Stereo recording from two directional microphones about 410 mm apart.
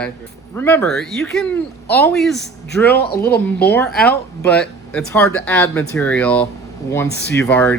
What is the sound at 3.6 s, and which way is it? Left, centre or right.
Speech, centre.